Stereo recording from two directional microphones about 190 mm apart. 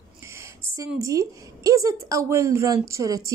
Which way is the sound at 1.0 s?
15° right (ahead or behind).